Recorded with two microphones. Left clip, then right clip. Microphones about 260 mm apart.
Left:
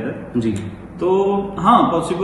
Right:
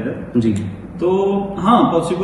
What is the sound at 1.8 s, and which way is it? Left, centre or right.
Speech, centre.